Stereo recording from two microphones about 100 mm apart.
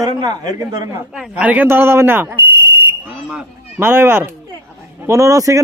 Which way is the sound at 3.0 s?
10° right (ahead or behind).